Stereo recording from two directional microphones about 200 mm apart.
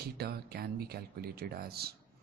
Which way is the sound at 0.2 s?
50° right (ahead or behind).